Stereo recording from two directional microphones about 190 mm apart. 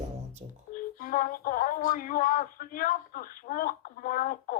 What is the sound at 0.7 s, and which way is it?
Music, 45° left (ahead or behind).